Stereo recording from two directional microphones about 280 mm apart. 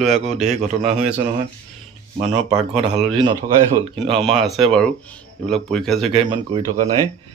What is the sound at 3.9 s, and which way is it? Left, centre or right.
Speech, centre.